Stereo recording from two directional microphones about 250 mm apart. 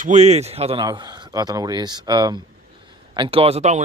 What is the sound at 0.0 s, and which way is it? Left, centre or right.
Speech, right.